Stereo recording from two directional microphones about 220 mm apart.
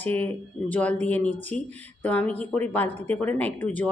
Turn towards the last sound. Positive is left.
turn(degrees=5)  # may be behind; listen again after turning